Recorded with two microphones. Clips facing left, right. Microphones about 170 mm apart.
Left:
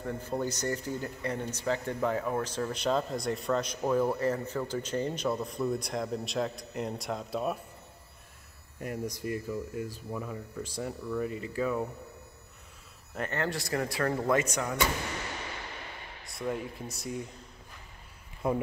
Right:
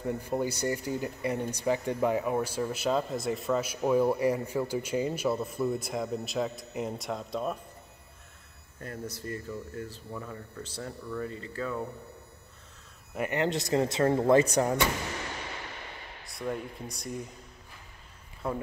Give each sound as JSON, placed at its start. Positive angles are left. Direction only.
{"t": 0.0, "sound": "speech", "side_deg": -10}
{"t": 8.7, "sound": "speech", "side_deg": 15}
{"t": 13.1, "sound": "speech", "side_deg": -10}
{"t": 16.3, "sound": "speech", "side_deg": 0}
{"t": 18.4, "sound": "speech", "side_deg": 15}